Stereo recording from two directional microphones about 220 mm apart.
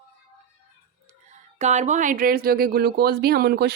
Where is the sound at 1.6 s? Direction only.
30° right (ahead or behind).